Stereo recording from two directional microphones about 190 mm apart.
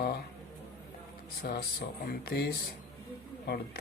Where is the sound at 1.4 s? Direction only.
55° left (ahead or behind).